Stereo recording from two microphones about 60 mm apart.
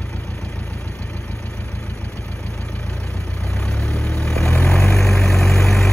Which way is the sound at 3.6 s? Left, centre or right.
Centre.